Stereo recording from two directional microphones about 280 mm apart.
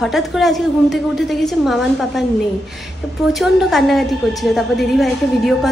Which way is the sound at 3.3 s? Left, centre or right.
Centre.